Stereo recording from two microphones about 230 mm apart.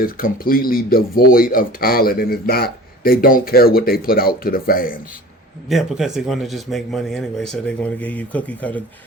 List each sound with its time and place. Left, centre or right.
0.0 s speech: left
5.6 s speech: centre